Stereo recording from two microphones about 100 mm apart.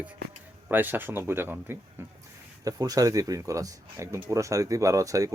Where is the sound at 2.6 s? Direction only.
40° right (ahead or behind).